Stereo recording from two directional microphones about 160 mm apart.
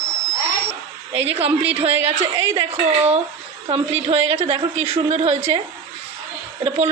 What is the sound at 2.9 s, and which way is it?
A woman's voice, 40° right (ahead or behind).